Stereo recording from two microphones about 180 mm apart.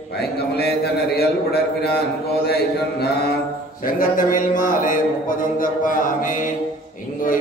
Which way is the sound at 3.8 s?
50° left (ahead or behind).